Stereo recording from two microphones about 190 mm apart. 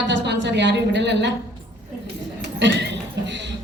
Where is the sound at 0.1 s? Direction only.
65° right (ahead or behind).